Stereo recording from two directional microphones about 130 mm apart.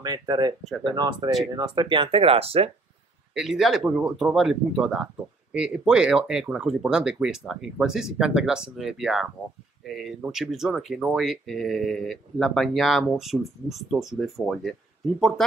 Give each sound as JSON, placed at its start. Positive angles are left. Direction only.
{"t": 0.0, "sound": "speech", "side_deg": -30}
{"t": 3.3, "sound": "speech", "side_deg": -5}